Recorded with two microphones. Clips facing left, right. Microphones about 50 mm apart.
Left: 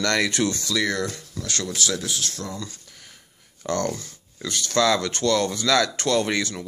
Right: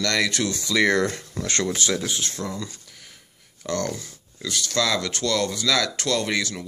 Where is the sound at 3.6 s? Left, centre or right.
Centre.